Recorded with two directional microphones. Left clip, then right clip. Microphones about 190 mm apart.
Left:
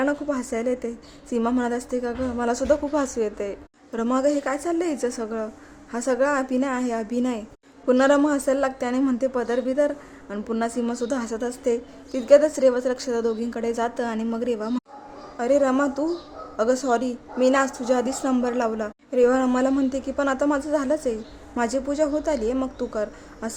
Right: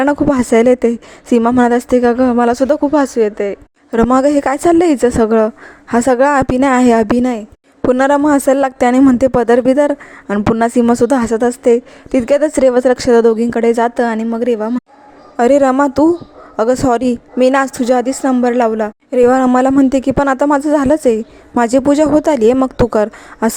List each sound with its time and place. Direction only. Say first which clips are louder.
0.0 s speech: right 12 dB; 45° right (ahead or behind)
4.1 s speech: right 9 dB; 45° right (ahead or behind)
15.4 s speech: right 11 dB; 45° right (ahead or behind)